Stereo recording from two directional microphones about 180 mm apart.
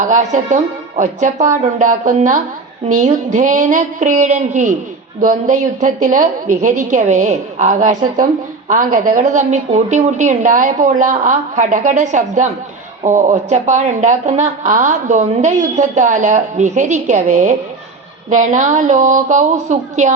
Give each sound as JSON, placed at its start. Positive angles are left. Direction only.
{"t": 0.0, "sound": "speech", "side_deg": -45}